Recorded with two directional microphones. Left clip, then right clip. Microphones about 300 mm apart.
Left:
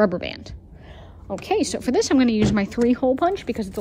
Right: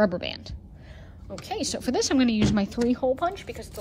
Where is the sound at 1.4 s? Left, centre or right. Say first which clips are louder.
Left 7 dB; left.